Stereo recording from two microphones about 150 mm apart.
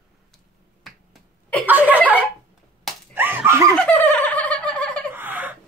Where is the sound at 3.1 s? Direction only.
15° right (ahead or behind).